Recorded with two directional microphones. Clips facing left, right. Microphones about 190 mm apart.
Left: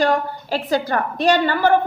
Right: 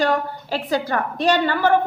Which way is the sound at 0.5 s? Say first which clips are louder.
Left 2 dB; 35° left (ahead or behind).